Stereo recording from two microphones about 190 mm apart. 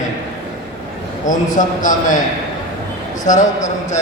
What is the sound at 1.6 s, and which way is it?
Speech, 40° left (ahead or behind).